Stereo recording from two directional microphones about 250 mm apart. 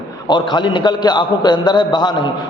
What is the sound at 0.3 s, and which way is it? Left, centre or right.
A man's voice, centre.